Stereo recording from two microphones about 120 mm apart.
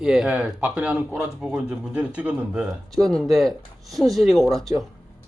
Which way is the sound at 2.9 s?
5° left (ahead or behind).